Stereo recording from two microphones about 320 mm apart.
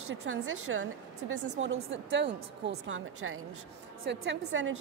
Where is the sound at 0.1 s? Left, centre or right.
Right.